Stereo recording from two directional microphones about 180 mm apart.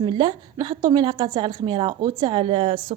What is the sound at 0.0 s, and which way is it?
A woman's voice, 25° right (ahead or behind).